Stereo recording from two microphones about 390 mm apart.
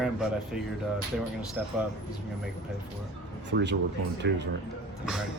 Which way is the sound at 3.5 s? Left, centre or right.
Right.